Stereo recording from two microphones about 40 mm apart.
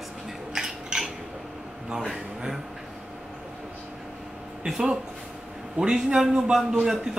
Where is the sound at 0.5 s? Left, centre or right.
Centre.